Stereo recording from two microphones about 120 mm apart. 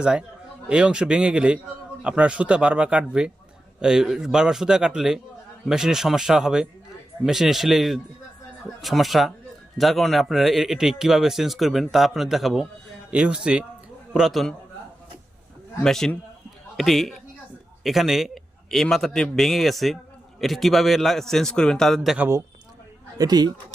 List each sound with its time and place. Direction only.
0.0 s a man's voice: 5° right (ahead or behind)
15.8 s speech: 5° left (ahead or behind)
23.1 s speech: 35° right (ahead or behind)